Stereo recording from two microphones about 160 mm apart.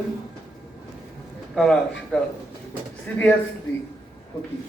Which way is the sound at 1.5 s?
Centre (ahead or behind).